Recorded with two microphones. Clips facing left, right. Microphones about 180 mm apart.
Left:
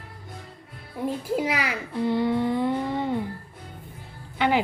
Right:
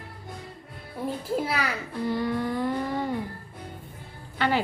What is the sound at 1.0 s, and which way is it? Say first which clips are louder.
Speech: left 2 dB; 15° left (ahead or behind).